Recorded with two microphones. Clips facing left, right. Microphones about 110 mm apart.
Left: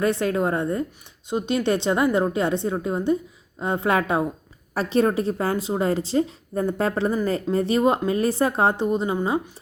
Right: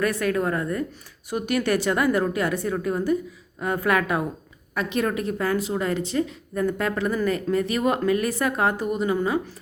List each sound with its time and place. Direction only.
0.0 s a woman's voice: 25° left (ahead or behind)